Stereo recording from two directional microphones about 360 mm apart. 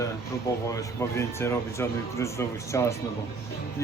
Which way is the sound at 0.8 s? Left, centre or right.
Centre.